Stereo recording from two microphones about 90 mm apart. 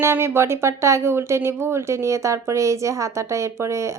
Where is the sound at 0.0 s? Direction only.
30° right (ahead or behind).